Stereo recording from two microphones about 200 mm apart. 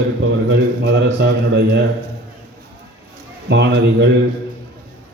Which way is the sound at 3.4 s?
60° right (ahead or behind).